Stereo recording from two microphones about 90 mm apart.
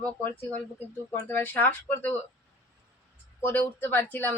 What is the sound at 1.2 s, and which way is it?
Speech, 25° left (ahead or behind).